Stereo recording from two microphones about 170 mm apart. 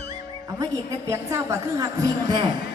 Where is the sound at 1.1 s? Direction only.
15° right (ahead or behind).